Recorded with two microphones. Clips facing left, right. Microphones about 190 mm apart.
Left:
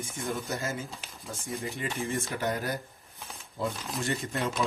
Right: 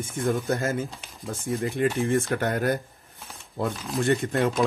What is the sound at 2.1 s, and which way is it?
Speech, 55° right (ahead or behind).